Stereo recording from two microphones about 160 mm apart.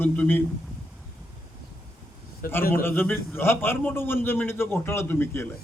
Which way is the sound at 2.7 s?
15° left (ahead or behind).